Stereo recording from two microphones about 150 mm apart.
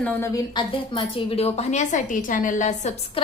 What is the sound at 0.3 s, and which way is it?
A woman's voice, 30° left (ahead or behind).